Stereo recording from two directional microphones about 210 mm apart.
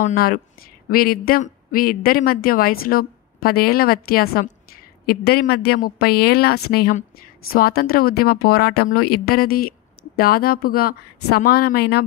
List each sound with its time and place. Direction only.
0.0 s a woman's voice: 45° left (ahead or behind)